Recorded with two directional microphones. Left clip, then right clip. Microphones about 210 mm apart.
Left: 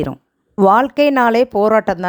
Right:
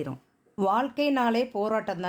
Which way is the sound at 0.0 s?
40° left (ahead or behind).